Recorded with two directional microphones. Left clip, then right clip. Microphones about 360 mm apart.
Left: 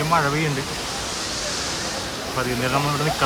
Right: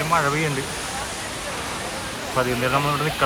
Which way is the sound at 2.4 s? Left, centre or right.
Centre.